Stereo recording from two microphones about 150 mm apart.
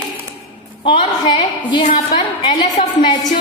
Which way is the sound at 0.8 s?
35° left (ahead or behind).